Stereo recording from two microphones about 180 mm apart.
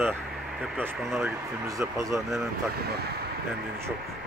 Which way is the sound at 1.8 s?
15° right (ahead or behind).